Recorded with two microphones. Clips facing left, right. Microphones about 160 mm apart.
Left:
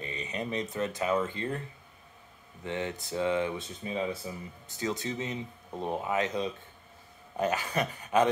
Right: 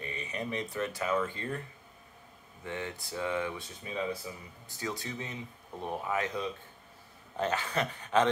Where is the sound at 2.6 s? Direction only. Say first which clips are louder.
Left 4 dB; 20° left (ahead or behind).